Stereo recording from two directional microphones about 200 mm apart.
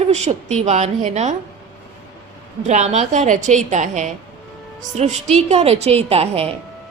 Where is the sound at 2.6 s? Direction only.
35° right (ahead or behind).